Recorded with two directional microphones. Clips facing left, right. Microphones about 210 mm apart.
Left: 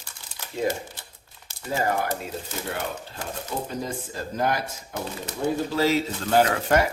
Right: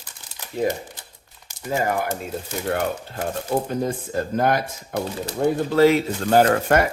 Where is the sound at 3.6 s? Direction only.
55° right (ahead or behind).